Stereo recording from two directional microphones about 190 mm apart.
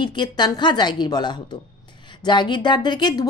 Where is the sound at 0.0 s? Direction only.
25° left (ahead or behind).